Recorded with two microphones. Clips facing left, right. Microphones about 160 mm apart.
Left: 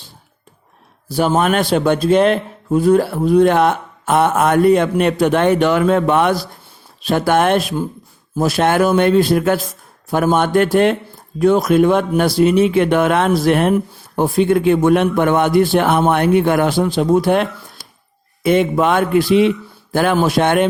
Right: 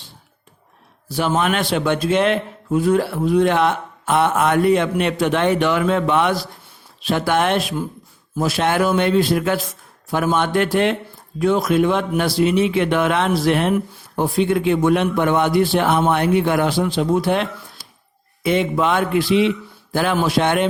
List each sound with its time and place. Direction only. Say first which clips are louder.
1.0 s speech: left 4 dB; 40° left (ahead or behind)